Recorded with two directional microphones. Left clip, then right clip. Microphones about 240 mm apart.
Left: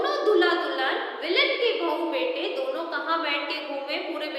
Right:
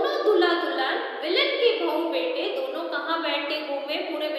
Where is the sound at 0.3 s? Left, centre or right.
Centre.